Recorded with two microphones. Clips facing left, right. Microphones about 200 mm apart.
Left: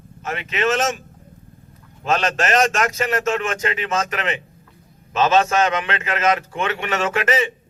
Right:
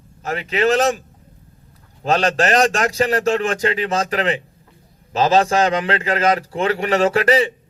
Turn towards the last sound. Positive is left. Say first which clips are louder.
# right 5 dB
turn(degrees=-35)  # may be behind; listen again after turning